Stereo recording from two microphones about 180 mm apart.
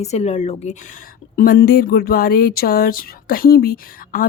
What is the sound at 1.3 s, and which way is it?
Speech, 55° left (ahead or behind).